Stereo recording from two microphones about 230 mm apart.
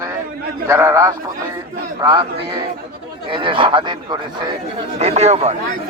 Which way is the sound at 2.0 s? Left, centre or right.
Centre.